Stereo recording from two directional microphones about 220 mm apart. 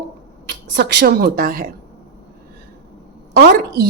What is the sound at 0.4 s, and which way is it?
A woman's voice, 50° right (ahead or behind).